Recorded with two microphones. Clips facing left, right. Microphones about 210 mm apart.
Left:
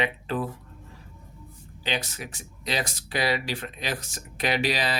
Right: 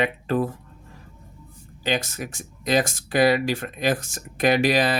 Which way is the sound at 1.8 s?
45° right (ahead or behind).